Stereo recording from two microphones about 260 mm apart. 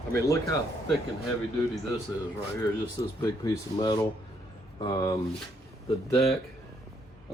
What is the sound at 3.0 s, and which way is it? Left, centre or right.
Speech, centre.